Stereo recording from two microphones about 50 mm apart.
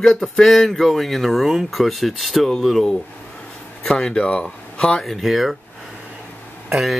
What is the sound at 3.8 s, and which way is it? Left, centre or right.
Speech, centre.